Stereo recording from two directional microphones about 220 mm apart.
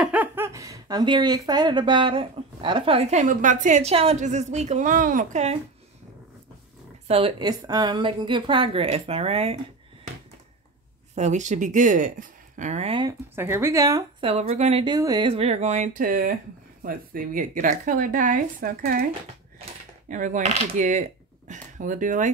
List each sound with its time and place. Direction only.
0.0 s speech: 5° right (ahead or behind); by 5.6 s 30° right (ahead or behind)
7.1 s speech: 25° right (ahead or behind)
11.1 s speech: 35° right (ahead or behind)
13.3 s a woman's voice: 10° right (ahead or behind)
14.5 s speech: 25° right (ahead or behind)
20.1 s speech: 35° right (ahead or behind)